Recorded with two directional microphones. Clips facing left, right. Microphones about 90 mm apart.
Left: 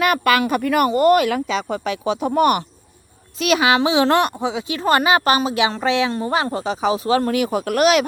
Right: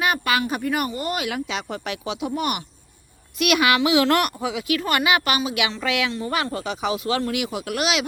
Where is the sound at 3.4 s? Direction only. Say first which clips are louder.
Left 3 dB; 30° left (ahead or behind).